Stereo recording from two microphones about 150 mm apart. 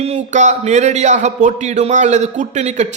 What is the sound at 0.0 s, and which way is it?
Speech, 50° right (ahead or behind).